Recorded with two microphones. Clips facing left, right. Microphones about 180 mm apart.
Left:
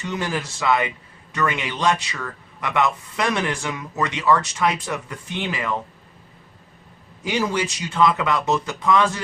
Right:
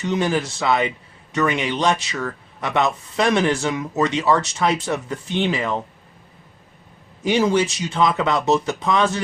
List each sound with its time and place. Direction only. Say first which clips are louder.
0.0 s a man's voice: right 6 dB; 20° right (ahead or behind)
7.3 s a man's voice: right 5 dB; 25° right (ahead or behind)